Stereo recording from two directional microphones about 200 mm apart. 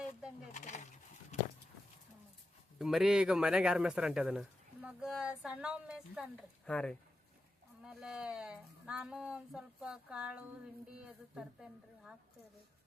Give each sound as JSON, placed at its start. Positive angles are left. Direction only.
{"t": 0.5, "sound": "horse", "side_deg": 35}
{"t": 2.7, "sound": "a man's voice", "side_deg": 0}
{"t": 6.7, "sound": "a man's voice", "side_deg": 5}